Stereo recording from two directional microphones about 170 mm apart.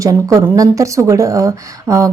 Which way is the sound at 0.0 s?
20° right (ahead or behind).